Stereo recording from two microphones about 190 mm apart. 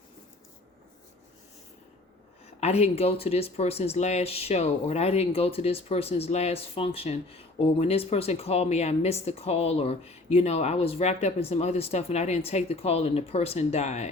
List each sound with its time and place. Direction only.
2.6 s speech: 35° left (ahead or behind)